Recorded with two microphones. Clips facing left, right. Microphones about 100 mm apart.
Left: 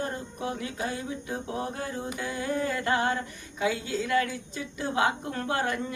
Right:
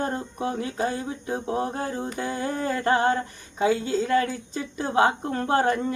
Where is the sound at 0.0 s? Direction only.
35° right (ahead or behind).